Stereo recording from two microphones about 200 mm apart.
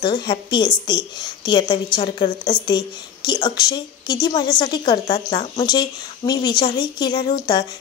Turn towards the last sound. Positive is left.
turn(degrees=20)  # may be behind; listen again after turning